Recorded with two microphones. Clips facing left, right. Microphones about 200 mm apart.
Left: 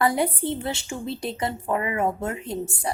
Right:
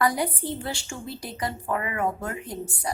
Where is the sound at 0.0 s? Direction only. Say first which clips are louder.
Left 3 dB; 25° left (ahead or behind).